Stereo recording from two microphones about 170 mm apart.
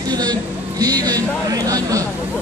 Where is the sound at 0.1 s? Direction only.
25° right (ahead or behind).